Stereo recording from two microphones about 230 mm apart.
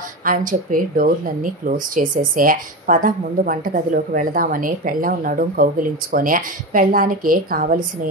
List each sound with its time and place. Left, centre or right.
0.2 s speech: right